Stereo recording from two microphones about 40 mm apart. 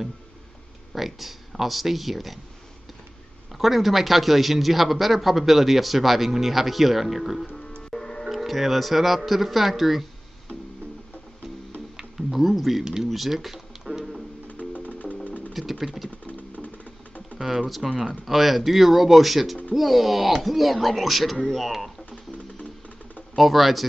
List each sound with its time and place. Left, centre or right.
0.9 s speech: centre
3.5 s speech: centre
7.5 s music: left
8.2 s speech: centre
12.0 s speech: centre
12.8 s speech: centre
13.1 s a sound: centre
14.5 s music: left
15.5 s speech: centre
16.3 s music: left
17.4 s speech: centre
21.4 s speech: centre
21.6 s speech: centre
23.3 s speech: centre